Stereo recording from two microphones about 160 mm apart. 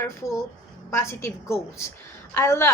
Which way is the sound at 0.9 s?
15° left (ahead or behind).